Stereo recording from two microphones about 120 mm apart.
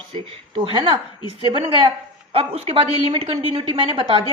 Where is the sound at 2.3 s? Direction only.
55° right (ahead or behind).